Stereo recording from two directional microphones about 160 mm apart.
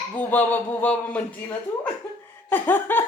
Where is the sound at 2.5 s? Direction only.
10° left (ahead or behind).